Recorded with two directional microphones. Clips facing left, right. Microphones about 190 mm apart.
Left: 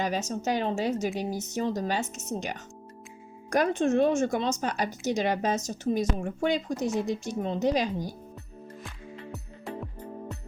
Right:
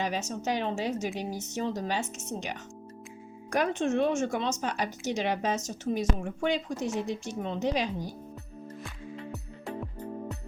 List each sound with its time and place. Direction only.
0.0 s speech: 40° left (ahead or behind)
9.3 s music: centre (ahead or behind)